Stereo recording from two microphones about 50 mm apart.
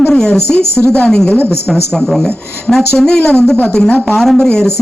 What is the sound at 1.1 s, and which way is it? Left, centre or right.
Speech, centre.